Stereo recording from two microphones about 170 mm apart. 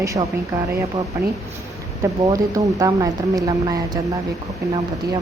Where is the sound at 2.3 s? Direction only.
20° right (ahead or behind).